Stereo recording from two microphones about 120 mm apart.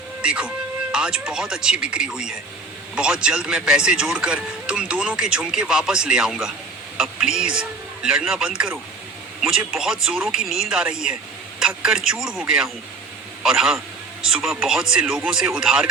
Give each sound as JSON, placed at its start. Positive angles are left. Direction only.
{"t": 0.2, "sound": "speech", "side_deg": -10}